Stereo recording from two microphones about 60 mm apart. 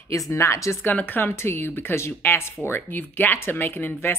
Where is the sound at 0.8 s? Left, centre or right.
Left.